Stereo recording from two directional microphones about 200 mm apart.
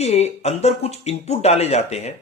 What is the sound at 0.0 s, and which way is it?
Speech, 30° left (ahead or behind).